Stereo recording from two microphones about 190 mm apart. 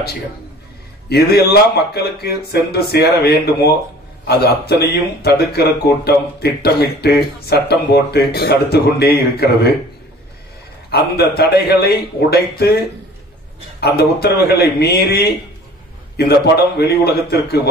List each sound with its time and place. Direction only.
1.0 s speech: 55° left (ahead or behind)
10.9 s speech: 55° left (ahead or behind)
13.7 s speech: 55° left (ahead or behind)